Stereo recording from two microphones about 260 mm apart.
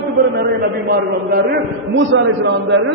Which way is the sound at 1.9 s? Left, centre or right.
Right.